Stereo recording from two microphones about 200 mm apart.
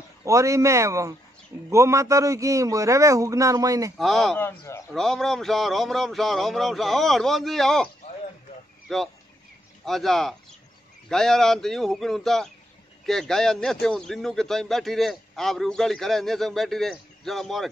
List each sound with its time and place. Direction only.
0.2 s a man's voice: 15° right (ahead or behind)
4.0 s speech: centre (ahead or behind)
4.9 s a man's voice: centre (ahead or behind)